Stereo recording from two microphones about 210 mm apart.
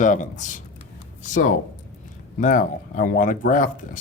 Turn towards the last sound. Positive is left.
turn(degrees=40)  # may be behind; listen again after turning